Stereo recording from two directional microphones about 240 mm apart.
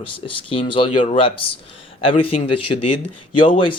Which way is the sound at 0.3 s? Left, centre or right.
Left.